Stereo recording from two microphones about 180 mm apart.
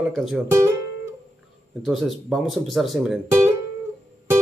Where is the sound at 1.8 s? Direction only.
Centre (ahead or behind).